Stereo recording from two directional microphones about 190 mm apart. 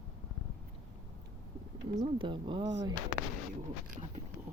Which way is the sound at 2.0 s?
25° right (ahead or behind).